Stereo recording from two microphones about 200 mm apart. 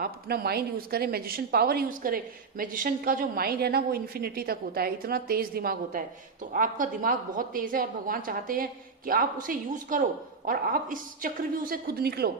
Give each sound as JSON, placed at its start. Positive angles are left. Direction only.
{"t": 0.0, "sound": "a woman's voice", "side_deg": -50}